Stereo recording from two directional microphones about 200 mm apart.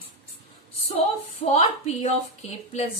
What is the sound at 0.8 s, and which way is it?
A woman's voice, 30° left (ahead or behind).